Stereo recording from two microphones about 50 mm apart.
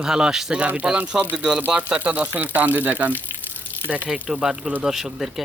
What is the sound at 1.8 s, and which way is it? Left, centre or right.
Speech, right.